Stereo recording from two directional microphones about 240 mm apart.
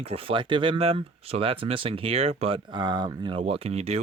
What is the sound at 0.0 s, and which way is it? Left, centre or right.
Speech, right.